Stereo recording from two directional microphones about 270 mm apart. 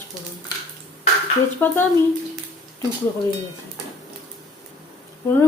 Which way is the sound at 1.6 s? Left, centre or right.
Centre.